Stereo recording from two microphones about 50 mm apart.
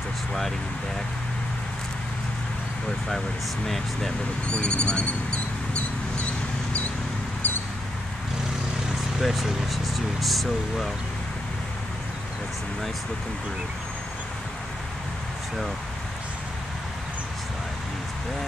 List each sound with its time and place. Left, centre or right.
3.6 s speech: centre
4.5 s speech: centre
5.8 s a sound: left
7.4 s mouse: left
9.2 s speech: centre